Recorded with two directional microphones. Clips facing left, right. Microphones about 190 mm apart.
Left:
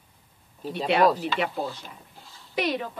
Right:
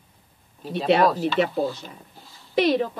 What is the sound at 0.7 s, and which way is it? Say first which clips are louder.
Speech: right 3 dB; 25° right (ahead or behind).